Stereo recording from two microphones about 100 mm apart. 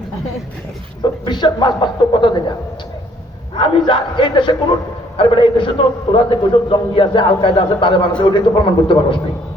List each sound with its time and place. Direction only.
1.2 s a man's voice: 45° left (ahead or behind)
3.5 s a man's voice: 55° left (ahead or behind)